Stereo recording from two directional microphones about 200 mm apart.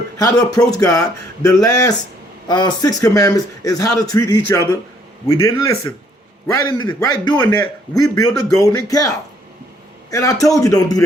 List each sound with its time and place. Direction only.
0.3 s a man's voice: 15° left (ahead or behind)